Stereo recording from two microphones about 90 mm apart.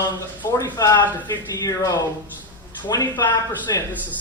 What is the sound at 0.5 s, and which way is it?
Speech, 45° left (ahead or behind).